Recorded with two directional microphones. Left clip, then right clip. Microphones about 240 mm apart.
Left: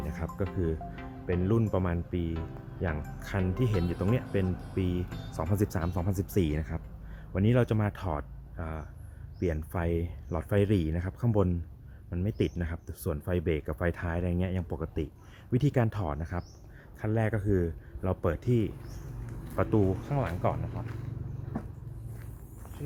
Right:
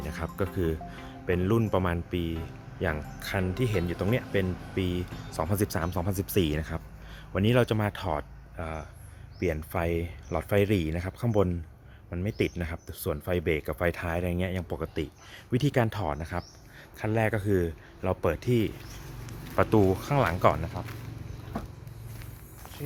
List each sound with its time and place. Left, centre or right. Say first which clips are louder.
0.0 s speech: right 3 dB; centre
19.6 s speech: right 5 dB; right
20.1 s speech: right 7 dB; right